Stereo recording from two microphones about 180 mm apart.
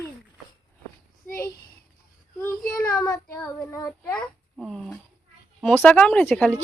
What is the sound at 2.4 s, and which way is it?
Speech, 10° left (ahead or behind).